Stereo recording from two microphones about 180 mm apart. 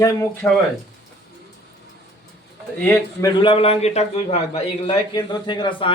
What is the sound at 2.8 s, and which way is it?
Speech, 10° left (ahead or behind).